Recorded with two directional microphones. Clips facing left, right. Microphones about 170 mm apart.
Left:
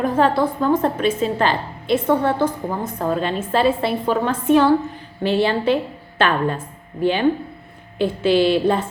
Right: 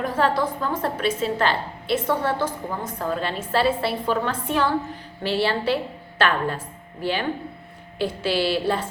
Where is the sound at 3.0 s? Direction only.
20° left (ahead or behind).